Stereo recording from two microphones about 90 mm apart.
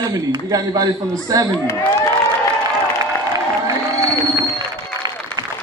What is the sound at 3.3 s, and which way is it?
Crowd, 40° right (ahead or behind).